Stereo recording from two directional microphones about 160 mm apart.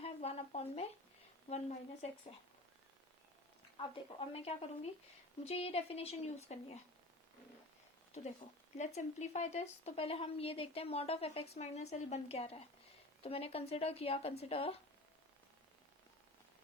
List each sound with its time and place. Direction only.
0.0 s a sound: 40° left (ahead or behind)
1.5 s a woman's voice: 45° left (ahead or behind)
3.8 s speech: 35° left (ahead or behind)
8.8 s speech: 45° left (ahead or behind)